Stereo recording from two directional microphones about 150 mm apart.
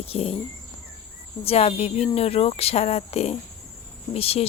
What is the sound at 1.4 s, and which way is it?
Speech, 40° left (ahead or behind).